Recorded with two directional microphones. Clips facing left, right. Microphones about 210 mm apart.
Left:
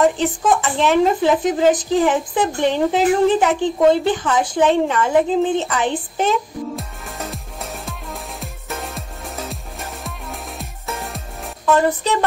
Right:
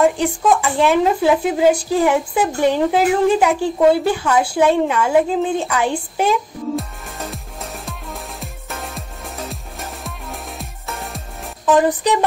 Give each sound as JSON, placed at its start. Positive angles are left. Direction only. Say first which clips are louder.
{"t": 0.0, "sound": "speech", "louder": "right 1 dB", "side_deg": -10}
{"t": 6.8, "sound": "music", "louder": "right 1 dB", "side_deg": 0}
{"t": 11.6, "sound": "speech", "louder": "right 2 dB", "side_deg": -15}